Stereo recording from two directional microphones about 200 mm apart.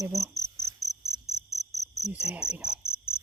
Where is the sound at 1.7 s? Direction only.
Centre (ahead or behind).